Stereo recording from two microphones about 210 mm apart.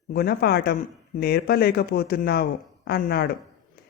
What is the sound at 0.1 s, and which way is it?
Speech, 45° left (ahead or behind).